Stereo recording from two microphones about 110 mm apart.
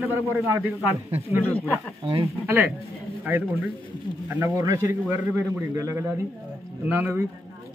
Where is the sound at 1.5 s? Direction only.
15° left (ahead or behind).